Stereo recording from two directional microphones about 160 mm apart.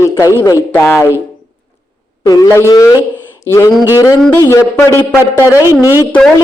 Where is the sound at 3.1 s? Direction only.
15° left (ahead or behind).